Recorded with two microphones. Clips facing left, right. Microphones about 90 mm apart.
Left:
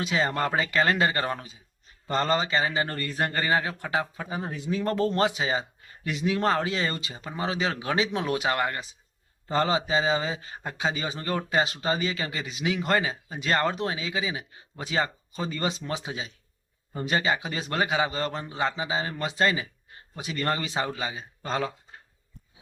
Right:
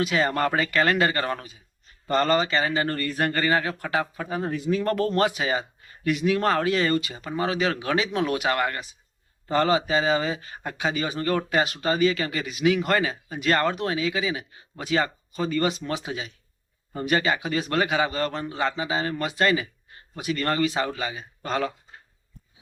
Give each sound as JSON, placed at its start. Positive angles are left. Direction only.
{"t": 0.0, "sound": "speech", "side_deg": 20}